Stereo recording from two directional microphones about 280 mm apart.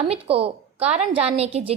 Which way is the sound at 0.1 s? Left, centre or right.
Centre.